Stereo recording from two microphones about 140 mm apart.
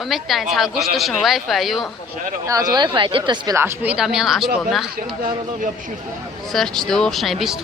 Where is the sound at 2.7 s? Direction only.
35° right (ahead or behind).